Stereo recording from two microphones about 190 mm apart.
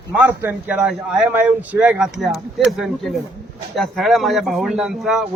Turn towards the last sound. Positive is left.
turn(degrees=0)  # may be behind; listen again after turning